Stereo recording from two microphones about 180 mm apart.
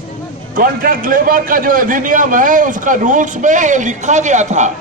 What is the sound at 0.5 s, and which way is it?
A man's voice, 50° right (ahead or behind).